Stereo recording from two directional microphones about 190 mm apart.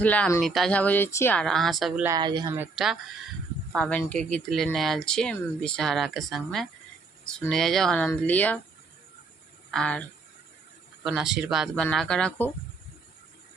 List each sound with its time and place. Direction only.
0.0 s speech: 10° left (ahead or behind)
2.0 s speech: 20° right (ahead or behind)
2.6 s speech: centre (ahead or behind)
9.7 s speech: 5° left (ahead or behind)